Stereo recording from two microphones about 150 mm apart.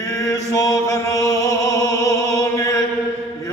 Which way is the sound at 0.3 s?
25° left (ahead or behind).